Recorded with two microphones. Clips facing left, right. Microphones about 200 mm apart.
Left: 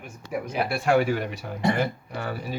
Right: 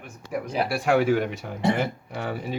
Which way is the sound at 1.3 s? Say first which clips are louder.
Right 1 dB; 20° right (ahead or behind).